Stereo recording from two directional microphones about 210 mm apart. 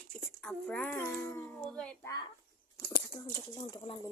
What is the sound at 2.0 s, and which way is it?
Speech, 20° left (ahead or behind).